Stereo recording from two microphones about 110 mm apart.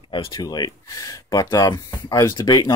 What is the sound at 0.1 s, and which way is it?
Speech, 50° left (ahead or behind).